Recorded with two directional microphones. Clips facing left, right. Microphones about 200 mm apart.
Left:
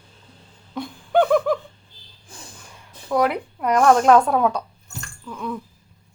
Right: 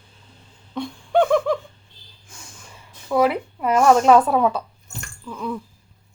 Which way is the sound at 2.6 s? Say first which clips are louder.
Left 1 dB; centre (ahead or behind).